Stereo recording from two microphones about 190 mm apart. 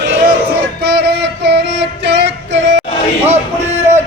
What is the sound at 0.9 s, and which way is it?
Music, 60° right (ahead or behind).